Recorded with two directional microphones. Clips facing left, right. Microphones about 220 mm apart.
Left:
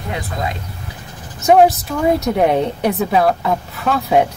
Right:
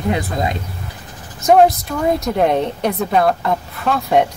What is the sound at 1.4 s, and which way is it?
Speech, 5° left (ahead or behind).